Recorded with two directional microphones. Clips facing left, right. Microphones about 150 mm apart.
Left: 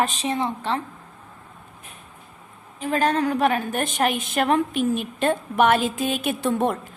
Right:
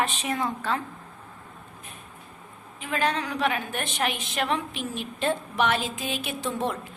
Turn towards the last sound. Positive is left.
turn(degrees=55)  # may be behind; listen again after turning